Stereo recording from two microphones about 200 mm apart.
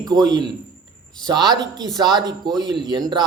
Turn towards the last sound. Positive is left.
turn(degrees=-20)  # may be behind; listen again after turning